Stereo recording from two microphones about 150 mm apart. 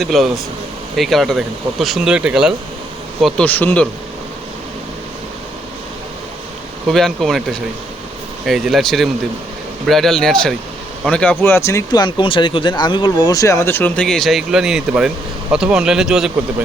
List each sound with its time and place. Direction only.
0.0 s speech: centre (ahead or behind)
3.4 s speech: 10° left (ahead or behind)
6.8 s speech: centre (ahead or behind)